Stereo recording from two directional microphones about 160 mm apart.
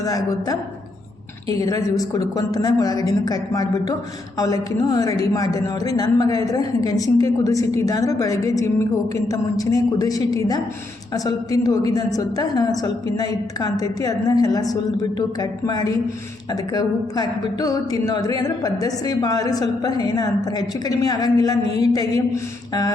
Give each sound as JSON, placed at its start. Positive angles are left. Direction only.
{"t": 0.0, "sound": "a woman's voice", "side_deg": 20}